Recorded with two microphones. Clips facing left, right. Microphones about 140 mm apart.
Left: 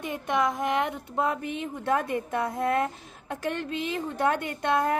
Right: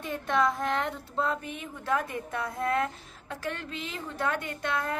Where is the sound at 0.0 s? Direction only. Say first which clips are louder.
Even; 15° left (ahead or behind).